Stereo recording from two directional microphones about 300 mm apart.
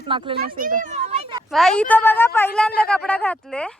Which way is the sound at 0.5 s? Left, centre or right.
Right.